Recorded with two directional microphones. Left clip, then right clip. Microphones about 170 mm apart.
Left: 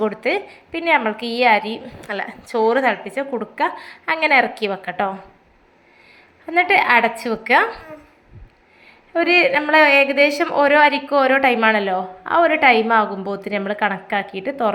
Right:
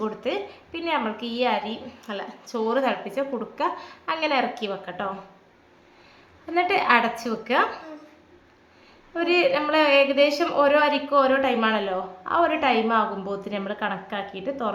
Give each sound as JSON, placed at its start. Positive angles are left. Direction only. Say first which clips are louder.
{"t": 0.0, "sound": "a woman's voice", "louder": "left 7 dB", "side_deg": 20}
{"t": 6.4, "sound": "a woman's voice", "louder": "left 7 dB", "side_deg": 15}
{"t": 9.1, "sound": "a woman's voice", "louder": "left 6 dB", "side_deg": 20}